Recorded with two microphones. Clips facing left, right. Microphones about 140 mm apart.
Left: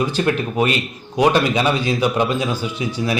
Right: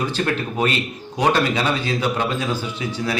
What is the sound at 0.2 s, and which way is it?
Speech, 20° left (ahead or behind).